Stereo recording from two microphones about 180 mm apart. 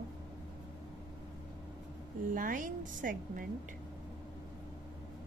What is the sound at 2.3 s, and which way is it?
A woman's voice, 50° right (ahead or behind).